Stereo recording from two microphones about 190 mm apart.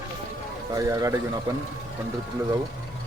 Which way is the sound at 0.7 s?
20° right (ahead or behind).